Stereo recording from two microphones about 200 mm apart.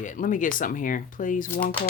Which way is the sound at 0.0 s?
40° left (ahead or behind).